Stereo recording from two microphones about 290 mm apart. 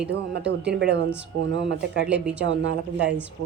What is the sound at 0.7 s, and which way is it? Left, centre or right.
Speech, right.